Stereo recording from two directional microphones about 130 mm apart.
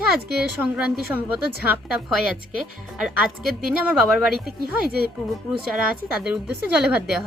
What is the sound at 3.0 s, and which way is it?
Speech, 5° right (ahead or behind).